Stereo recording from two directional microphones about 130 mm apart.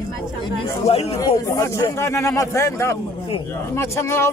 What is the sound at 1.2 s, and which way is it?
A man's voice, 25° left (ahead or behind).